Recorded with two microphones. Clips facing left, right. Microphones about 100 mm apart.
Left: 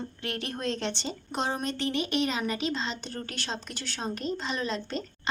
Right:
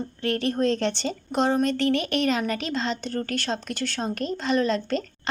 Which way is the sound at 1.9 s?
60° right (ahead or behind).